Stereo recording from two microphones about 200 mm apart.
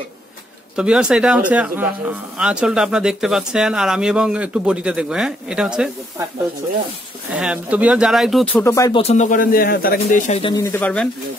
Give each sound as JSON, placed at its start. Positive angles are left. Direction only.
{"t": 0.7, "sound": "speech", "side_deg": -5}
{"t": 7.3, "sound": "speech", "side_deg": -5}
{"t": 8.6, "sound": "speech", "side_deg": 15}
{"t": 9.0, "sound": "speech", "side_deg": 35}
{"t": 10.4, "sound": "speech", "side_deg": 15}